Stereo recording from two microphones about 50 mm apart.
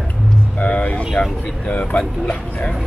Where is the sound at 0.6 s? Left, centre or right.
Left.